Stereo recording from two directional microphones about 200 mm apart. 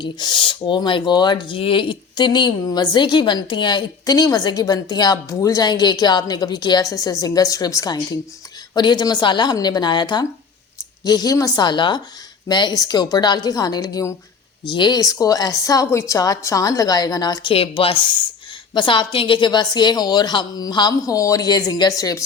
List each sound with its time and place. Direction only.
0.0 s a woman's voice: 25° left (ahead or behind)